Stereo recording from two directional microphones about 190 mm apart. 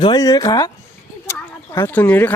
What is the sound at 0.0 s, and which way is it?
Speech, 20° left (ahead or behind).